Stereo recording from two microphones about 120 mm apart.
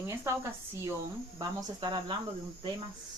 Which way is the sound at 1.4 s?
35° right (ahead or behind).